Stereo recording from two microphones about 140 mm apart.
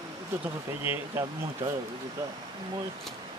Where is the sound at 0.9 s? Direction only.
15° right (ahead or behind).